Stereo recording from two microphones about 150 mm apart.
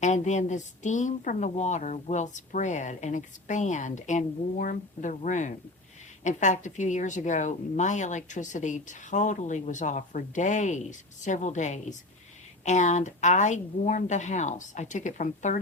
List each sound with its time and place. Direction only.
0.0 s a woman's voice: 50° left (ahead or behind)